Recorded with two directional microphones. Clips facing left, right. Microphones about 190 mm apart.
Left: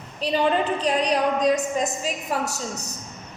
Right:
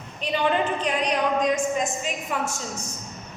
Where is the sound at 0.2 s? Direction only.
35° left (ahead or behind).